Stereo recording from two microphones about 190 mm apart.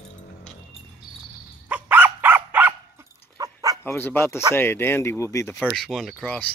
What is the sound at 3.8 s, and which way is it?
Speech, 10° left (ahead or behind).